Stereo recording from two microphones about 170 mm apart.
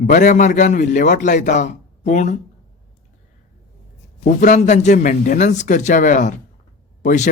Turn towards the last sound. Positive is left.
turn(degrees=45)  # may be behind; listen again after turning